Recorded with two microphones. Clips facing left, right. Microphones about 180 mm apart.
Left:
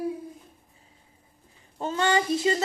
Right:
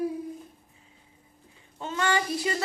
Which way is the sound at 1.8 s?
40° left (ahead or behind).